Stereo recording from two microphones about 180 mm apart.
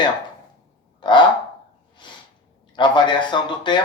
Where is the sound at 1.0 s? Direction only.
25° left (ahead or behind).